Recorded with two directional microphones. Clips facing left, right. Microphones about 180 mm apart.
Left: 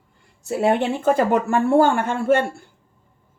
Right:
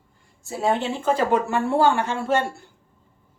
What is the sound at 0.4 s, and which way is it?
Speech, 65° left (ahead or behind).